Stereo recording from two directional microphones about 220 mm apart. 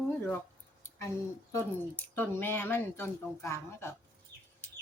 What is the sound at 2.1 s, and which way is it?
Speech, 10° left (ahead or behind).